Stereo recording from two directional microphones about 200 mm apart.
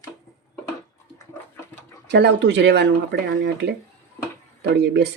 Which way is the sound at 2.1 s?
60° right (ahead or behind).